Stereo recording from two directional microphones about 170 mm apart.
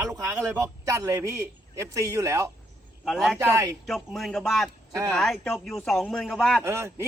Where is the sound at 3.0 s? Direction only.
Centre (ahead or behind).